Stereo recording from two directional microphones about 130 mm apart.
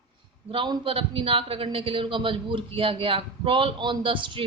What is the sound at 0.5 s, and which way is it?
A man's voice, 40° right (ahead or behind).